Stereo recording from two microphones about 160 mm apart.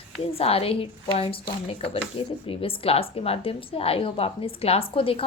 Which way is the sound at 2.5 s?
35° left (ahead or behind).